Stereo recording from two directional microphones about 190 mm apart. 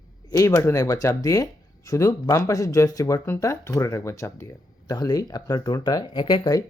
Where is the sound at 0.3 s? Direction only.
15° left (ahead or behind).